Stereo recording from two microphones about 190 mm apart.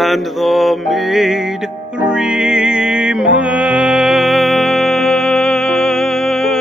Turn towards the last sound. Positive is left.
turn(degrees=0)  # may be behind; listen again after turning